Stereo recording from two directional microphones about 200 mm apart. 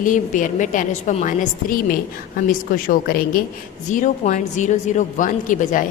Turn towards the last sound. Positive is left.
turn(degrees=40)  # may be behind; listen again after turning